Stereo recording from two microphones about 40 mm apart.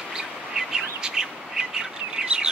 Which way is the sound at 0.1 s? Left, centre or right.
Centre.